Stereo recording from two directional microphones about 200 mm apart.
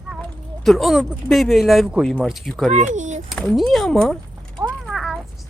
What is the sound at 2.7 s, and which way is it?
Speech, 35° right (ahead or behind).